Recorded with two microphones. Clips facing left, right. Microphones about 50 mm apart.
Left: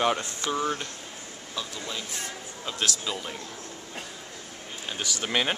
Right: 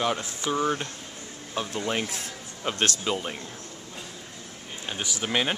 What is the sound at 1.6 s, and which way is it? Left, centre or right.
Speech, right.